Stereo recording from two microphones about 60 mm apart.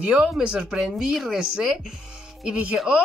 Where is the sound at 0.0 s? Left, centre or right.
Right.